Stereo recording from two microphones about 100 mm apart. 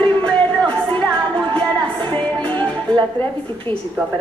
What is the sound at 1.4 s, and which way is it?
Music, 55° right (ahead or behind).